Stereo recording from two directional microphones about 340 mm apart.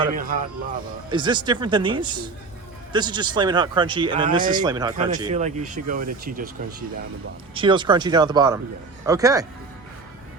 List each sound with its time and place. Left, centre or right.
0.0 s speech: right
1.1 s speech: centre
7.5 s speech: centre